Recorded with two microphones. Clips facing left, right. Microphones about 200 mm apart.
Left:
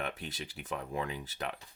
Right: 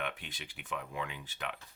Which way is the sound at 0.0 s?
40° left (ahead or behind).